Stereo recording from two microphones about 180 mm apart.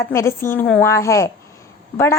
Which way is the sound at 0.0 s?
15° left (ahead or behind).